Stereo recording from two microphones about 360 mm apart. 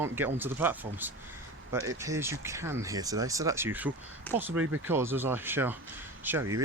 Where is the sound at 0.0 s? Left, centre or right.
Centre.